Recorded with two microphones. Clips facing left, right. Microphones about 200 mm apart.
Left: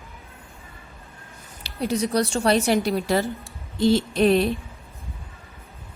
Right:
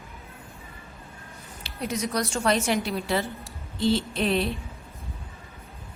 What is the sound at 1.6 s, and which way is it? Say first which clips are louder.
A woman's voice: left 5 dB; 30° left (ahead or behind).